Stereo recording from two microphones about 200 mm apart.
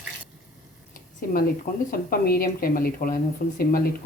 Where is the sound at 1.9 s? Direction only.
50° left (ahead or behind).